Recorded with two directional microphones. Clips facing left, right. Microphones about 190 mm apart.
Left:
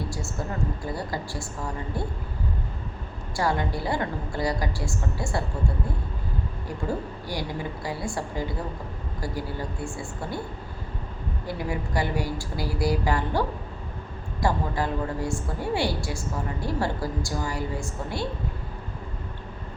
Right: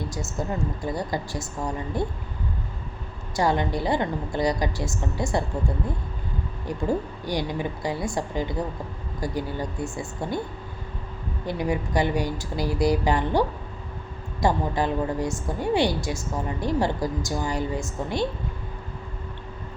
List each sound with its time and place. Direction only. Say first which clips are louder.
0.9 s a woman's voice: right 3 dB; 20° right (ahead or behind)
3.3 s a woman's voice: right 3 dB; 20° right (ahead or behind)
7.3 s a woman's voice: right 5 dB; 20° right (ahead or behind)
11.4 s a woman's voice: right 5 dB; 20° right (ahead or behind)
14.4 s a woman's voice: right 3 dB; 20° right (ahead or behind)